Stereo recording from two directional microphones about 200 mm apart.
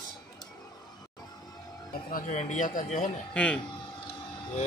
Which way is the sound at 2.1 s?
35° left (ahead or behind).